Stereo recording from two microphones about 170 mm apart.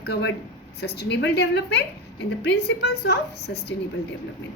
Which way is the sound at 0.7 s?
75° left (ahead or behind).